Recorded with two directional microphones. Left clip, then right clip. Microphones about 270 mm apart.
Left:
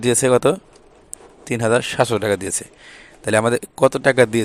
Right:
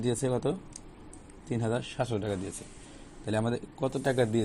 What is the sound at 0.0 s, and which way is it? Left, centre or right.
Speech, left.